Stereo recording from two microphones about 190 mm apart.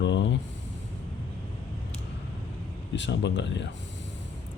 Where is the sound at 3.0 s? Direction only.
70° left (ahead or behind).